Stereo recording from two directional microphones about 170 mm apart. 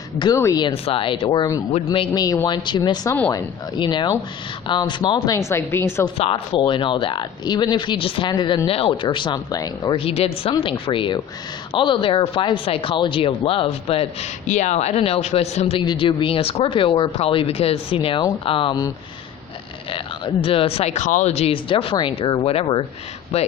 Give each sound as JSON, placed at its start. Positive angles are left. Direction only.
{"t": 0.2, "sound": "a woman's voice", "side_deg": 20}
{"t": 6.1, "sound": "speech", "side_deg": 35}
{"t": 20.4, "sound": "speech", "side_deg": 30}